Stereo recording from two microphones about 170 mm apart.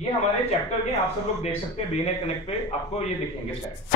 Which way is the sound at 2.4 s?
40° left (ahead or behind).